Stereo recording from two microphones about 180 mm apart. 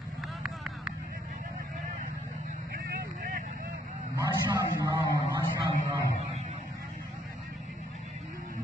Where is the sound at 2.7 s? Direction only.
50° right (ahead or behind).